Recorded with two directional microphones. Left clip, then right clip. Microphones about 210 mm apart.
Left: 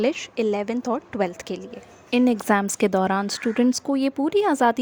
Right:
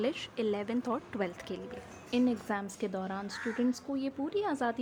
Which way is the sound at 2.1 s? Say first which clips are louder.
Left 12 dB; 50° left (ahead or behind).